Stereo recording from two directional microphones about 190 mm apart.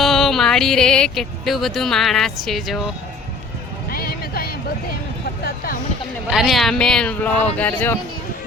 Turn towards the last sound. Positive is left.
turn(degrees=10)  # may be behind; listen again after turning